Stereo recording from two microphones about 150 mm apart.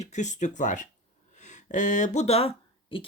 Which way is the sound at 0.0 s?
50° left (ahead or behind).